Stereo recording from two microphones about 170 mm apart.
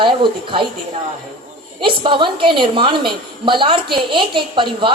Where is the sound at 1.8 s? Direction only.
30° right (ahead or behind).